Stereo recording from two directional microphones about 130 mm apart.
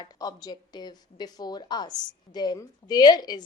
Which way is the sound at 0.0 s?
30° left (ahead or behind).